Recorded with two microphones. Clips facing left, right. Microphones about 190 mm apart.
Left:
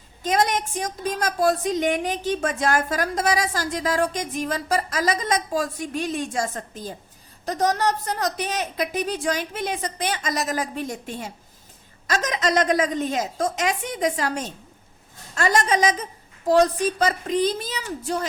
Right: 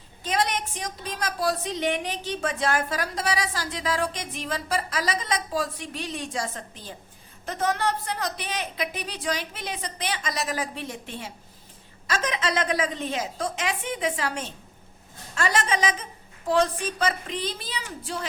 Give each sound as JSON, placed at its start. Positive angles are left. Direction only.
{"t": 0.2, "sound": "a woman's voice", "side_deg": 45}